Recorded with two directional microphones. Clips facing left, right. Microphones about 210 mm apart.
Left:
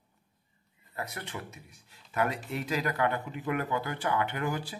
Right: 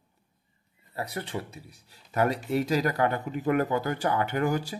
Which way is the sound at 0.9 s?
35° right (ahead or behind).